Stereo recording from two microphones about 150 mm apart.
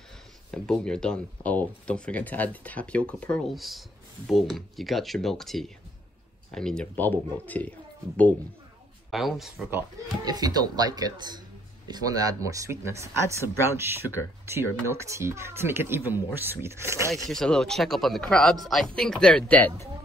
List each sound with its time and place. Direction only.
0.5 s a man's voice: 5° left (ahead or behind)
9.1 s a man's voice: centre (ahead or behind)
10.2 s speech: 25° right (ahead or behind)
17.3 s a man's voice: 5° left (ahead or behind)